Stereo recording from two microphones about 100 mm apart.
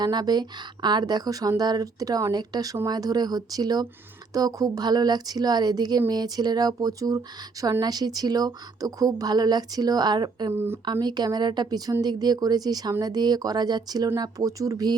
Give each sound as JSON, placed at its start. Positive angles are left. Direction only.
{"t": 0.0, "sound": "speech", "side_deg": -45}